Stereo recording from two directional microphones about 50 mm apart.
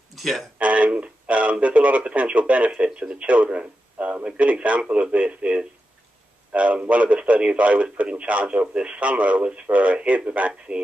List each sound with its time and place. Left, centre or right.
0.1 s speech: centre
0.6 s a man's voice: right